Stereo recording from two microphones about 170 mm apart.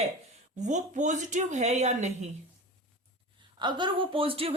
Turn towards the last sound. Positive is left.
turn(degrees=-35)  # may be behind; listen again after turning